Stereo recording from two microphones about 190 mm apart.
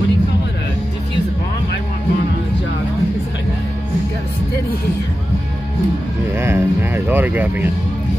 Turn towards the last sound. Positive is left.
turn(degrees=-10)  # may be behind; listen again after turning